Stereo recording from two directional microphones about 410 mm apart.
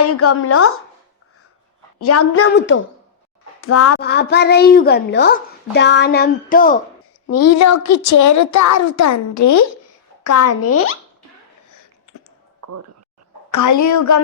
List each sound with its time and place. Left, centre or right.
0.0 s a child's voice: left
2.0 s a child's voice: left
7.3 s a child's voice: left
13.5 s a woman's voice: left